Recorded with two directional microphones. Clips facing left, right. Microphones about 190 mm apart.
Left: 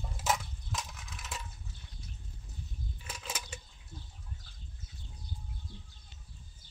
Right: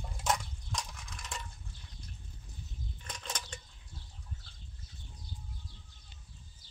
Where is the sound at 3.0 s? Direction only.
5° left (ahead or behind).